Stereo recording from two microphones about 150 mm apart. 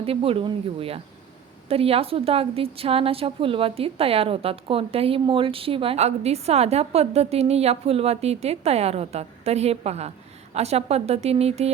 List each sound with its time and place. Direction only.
0.0 s a woman's voice: 40° right (ahead or behind)